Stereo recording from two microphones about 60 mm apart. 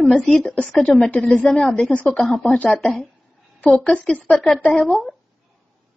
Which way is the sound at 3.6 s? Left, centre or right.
Left.